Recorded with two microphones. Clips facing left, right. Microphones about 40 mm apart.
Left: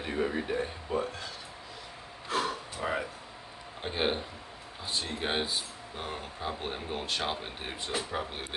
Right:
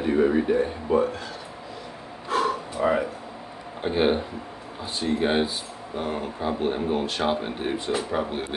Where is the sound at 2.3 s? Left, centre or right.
Centre.